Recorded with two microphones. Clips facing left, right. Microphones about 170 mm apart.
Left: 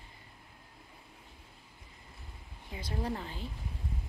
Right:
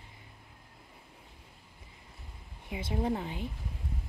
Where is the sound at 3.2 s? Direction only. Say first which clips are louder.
Right 4 dB; 15° right (ahead or behind).